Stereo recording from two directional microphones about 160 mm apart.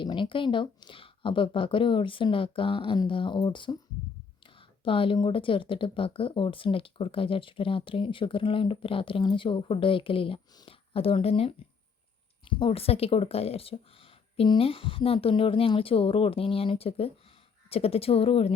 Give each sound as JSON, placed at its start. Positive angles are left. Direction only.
{"t": 0.0, "sound": "speech", "side_deg": 30}
{"t": 4.8, "sound": "speech", "side_deg": 35}